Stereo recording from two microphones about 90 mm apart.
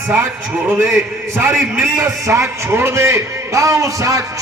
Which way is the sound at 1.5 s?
Centre (ahead or behind).